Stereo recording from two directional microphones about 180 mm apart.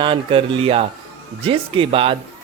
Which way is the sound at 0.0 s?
30° right (ahead or behind).